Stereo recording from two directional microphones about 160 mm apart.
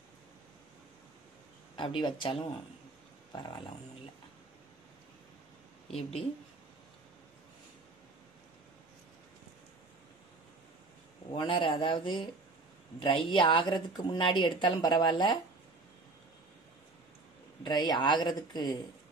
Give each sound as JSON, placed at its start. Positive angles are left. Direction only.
{"t": 1.8, "sound": "speech", "side_deg": 30}
{"t": 3.3, "sound": "a woman's voice", "side_deg": 30}
{"t": 5.9, "sound": "speech", "side_deg": 40}
{"t": 11.3, "sound": "a woman's voice", "side_deg": 30}
{"t": 17.6, "sound": "a woman's voice", "side_deg": 25}